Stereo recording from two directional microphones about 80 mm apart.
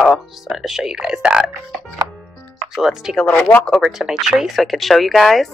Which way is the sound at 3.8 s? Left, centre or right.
Centre.